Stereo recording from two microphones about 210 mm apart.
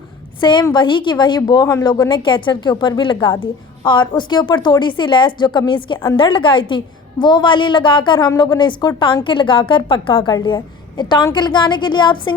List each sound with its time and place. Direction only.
0.3 s a woman's voice: 20° left (ahead or behind)